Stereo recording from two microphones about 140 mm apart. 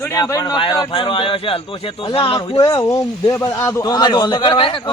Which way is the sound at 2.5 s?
25° left (ahead or behind).